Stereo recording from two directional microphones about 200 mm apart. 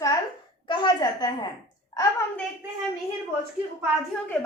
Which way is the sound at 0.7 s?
25° left (ahead or behind).